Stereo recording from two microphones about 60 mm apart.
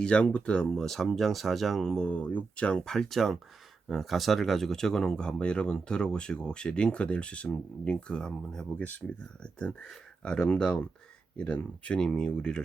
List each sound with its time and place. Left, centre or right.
0.0 s speech: centre
2.0 s speech: left
2.6 s speech: centre
9.8 s speech: centre